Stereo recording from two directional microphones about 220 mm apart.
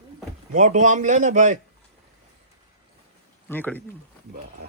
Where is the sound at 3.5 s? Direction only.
10° left (ahead or behind).